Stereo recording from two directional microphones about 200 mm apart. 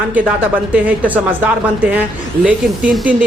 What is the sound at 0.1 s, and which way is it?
Speech, 5° right (ahead or behind).